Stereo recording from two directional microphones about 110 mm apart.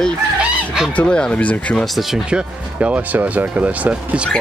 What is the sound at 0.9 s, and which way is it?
Speech, 10° left (ahead or behind).